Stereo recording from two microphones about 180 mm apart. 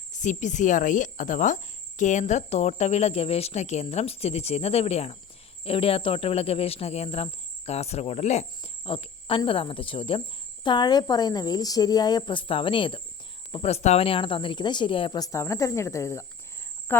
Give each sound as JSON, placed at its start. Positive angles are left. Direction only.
{"t": 0.1, "sound": "speech", "side_deg": 45}